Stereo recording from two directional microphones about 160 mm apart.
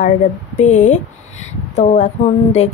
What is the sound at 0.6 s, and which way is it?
A woman's voice, 50° left (ahead or behind).